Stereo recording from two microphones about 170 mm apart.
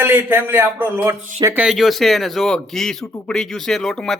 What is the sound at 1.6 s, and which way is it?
Speech, centre (ahead or behind).